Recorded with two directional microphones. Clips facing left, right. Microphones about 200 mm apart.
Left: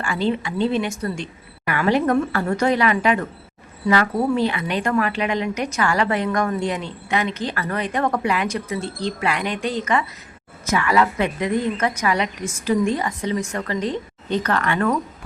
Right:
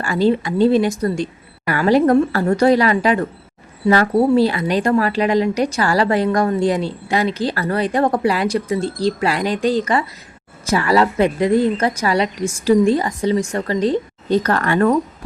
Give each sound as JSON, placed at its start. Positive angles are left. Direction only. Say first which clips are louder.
{"t": 0.0, "sound": "a woman's voice", "louder": "right 6 dB", "side_deg": -40}